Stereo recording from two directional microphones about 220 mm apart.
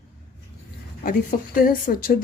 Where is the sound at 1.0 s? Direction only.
40° left (ahead or behind).